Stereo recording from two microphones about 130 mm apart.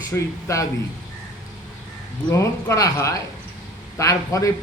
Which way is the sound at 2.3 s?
25° left (ahead or behind).